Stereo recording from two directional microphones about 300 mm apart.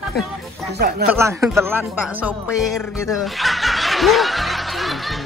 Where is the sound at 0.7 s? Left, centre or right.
Right.